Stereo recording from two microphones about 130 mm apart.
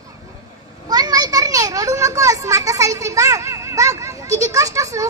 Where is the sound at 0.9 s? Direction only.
30° right (ahead or behind).